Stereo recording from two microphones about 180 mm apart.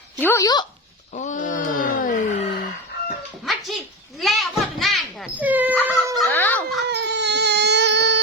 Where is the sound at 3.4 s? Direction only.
Centre (ahead or behind).